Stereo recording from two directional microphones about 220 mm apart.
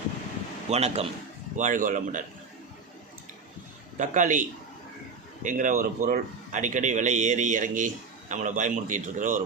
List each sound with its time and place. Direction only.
0.7 s a man's voice: 30° right (ahead or behind)
3.9 s speech: 35° right (ahead or behind)